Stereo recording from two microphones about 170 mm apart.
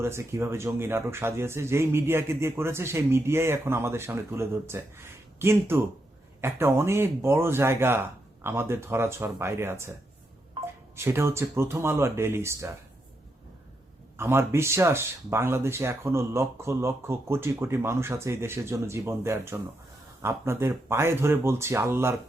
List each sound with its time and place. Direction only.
0.0 s speech: 15° right (ahead or behind)
10.6 s telephone: 30° right (ahead or behind)
10.9 s speech: 15° right (ahead or behind)
14.2 s speech: 15° right (ahead or behind)